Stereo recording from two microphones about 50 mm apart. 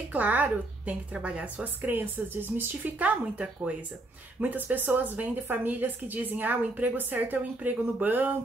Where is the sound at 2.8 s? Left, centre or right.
Right.